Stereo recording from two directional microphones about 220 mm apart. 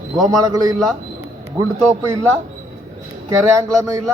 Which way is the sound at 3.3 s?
15° right (ahead or behind).